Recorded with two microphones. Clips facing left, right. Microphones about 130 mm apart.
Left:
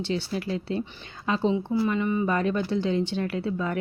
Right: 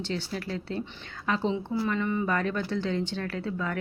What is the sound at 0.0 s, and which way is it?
Speech, 15° left (ahead or behind).